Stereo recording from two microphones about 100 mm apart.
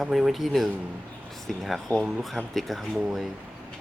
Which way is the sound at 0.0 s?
Centre (ahead or behind).